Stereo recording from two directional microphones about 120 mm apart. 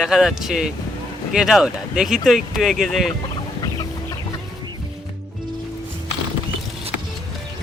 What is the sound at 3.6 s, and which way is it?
Chicken, 30° left (ahead or behind).